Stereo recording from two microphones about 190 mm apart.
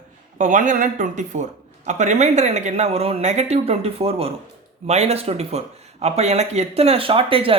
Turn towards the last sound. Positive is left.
turn(degrees=-30)  # may be behind; listen again after turning